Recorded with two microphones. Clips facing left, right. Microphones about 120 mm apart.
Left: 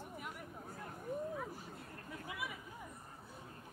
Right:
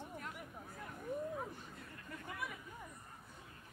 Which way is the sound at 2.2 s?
5° left (ahead or behind).